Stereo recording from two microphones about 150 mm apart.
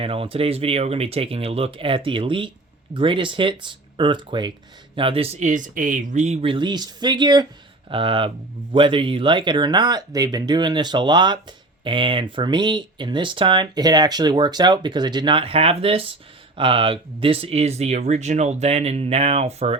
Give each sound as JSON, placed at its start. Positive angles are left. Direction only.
{"t": 0.0, "sound": "speech", "side_deg": -40}